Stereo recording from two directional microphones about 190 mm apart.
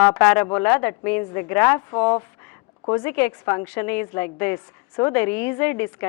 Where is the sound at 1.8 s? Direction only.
20° left (ahead or behind).